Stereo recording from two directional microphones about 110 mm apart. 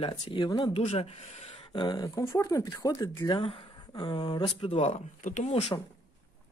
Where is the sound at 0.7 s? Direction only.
80° left.